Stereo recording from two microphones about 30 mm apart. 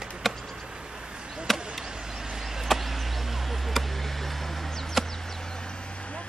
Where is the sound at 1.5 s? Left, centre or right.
Centre.